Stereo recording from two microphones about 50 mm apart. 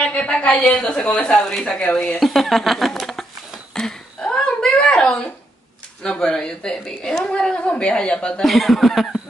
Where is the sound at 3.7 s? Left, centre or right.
Centre.